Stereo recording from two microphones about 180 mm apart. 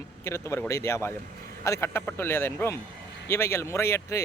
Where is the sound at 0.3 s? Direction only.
15° left (ahead or behind).